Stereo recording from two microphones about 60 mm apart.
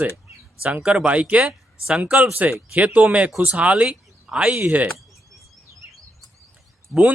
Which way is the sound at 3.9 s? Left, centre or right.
Centre.